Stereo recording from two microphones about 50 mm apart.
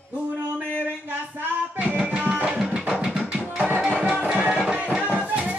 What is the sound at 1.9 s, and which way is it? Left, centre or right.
Music, right.